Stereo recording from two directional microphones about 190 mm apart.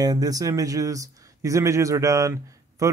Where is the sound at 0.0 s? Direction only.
20° right (ahead or behind).